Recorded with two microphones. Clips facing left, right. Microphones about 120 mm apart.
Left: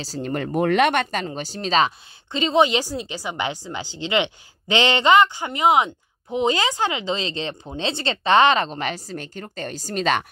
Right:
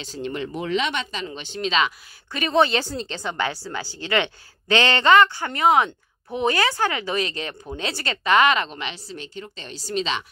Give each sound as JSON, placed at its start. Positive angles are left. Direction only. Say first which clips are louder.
{"t": 0.0, "sound": "a woman's voice", "louder": "left 2 dB", "side_deg": 40}
{"t": 2.3, "sound": "a woman's voice", "louder": "left 2 dB", "side_deg": 20}